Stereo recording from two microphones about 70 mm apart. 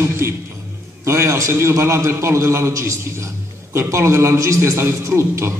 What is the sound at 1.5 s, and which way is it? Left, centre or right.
A man's voice, right.